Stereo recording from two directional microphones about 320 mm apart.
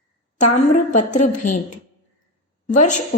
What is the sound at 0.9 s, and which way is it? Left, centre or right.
Speech, left.